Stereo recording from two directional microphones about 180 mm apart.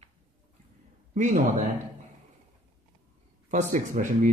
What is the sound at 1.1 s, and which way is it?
Speech, 45° right (ahead or behind).